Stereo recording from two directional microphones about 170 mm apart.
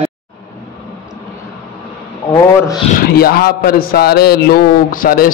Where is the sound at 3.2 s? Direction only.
65° left (ahead or behind).